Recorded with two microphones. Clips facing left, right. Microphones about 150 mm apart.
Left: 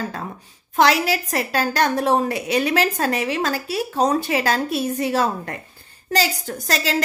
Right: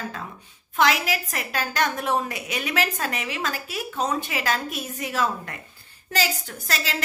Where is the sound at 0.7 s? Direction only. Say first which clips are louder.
Left 5 dB; 35° left (ahead or behind).